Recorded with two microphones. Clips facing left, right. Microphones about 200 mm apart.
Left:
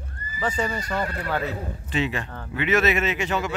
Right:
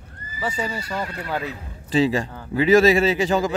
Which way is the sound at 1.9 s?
30° right (ahead or behind).